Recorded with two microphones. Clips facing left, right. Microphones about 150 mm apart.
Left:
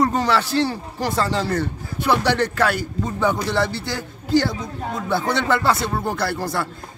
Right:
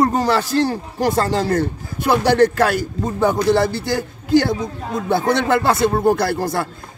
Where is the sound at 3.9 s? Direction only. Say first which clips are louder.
Right 5 dB; 45° right (ahead or behind).